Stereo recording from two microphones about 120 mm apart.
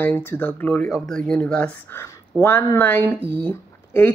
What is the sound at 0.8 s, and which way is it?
A woman's voice, 5° left (ahead or behind).